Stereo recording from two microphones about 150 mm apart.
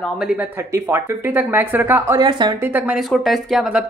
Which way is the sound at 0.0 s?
5° right (ahead or behind).